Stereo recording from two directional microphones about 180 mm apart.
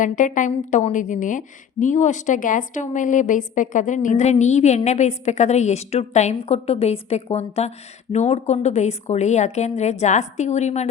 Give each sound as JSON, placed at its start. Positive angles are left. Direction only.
{"t": 0.0, "sound": "a woman's voice", "side_deg": 45}